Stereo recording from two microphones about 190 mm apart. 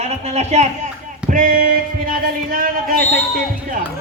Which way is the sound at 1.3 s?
45° right (ahead or behind).